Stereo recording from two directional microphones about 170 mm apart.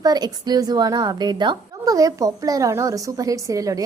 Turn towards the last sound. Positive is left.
turn(degrees=-20)  # may be behind; listen again after turning